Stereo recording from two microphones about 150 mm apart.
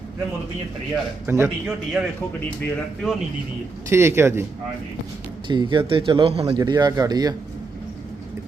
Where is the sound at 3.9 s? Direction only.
15° right (ahead or behind).